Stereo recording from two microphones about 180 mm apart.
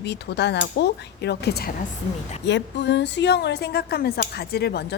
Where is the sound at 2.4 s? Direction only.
75° left (ahead or behind).